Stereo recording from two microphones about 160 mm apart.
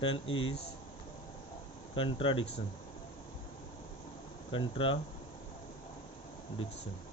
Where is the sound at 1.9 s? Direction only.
35° left (ahead or behind).